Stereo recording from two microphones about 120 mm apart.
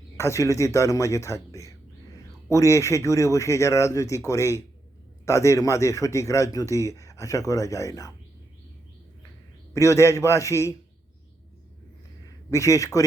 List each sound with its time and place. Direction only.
0.2 s speech: 25° left (ahead or behind)
9.7 s speech: 25° left (ahead or behind)
12.5 s speech: 25° left (ahead or behind)